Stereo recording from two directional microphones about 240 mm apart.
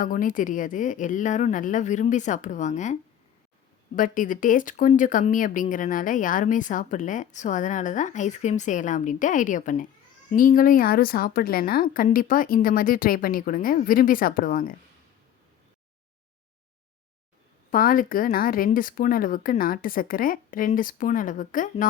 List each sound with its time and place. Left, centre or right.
0.0 s speech: left
17.7 s speech: left